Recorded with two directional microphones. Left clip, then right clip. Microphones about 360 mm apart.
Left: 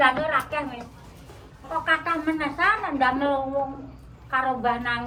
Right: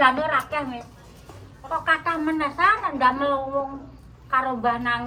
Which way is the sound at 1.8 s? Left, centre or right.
Right.